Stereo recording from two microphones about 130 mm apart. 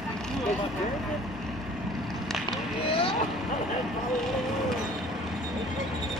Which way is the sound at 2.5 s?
45° left (ahead or behind).